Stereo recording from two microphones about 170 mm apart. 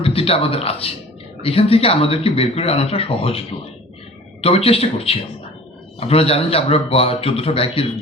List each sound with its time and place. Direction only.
0.0 s a man's voice: 35° left (ahead or behind)